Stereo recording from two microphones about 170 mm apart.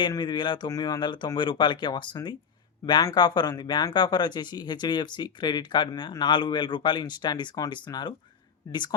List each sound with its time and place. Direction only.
0.0 s speech: 25° left (ahead or behind)